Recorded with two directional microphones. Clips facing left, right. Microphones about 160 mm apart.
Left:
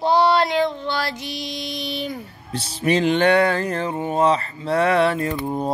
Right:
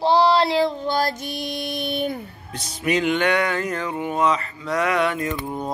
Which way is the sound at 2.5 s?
30° left (ahead or behind).